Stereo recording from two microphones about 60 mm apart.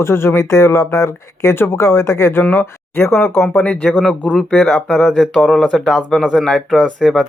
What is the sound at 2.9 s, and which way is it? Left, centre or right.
Speech, centre.